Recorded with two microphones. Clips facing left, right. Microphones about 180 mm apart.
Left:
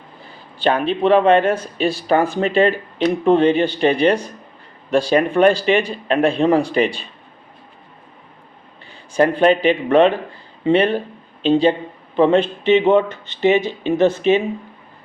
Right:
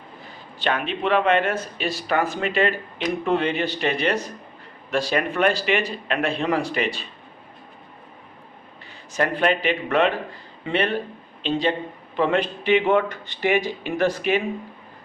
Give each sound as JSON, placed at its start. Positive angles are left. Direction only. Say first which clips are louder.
{"t": 0.6, "sound": "speech", "louder": "left 7 dB", "side_deg": 35}
{"t": 9.1, "sound": "speech", "louder": "left 7 dB", "side_deg": 30}